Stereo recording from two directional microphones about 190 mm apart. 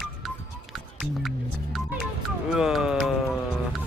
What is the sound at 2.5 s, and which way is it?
Speech, 5° right (ahead or behind).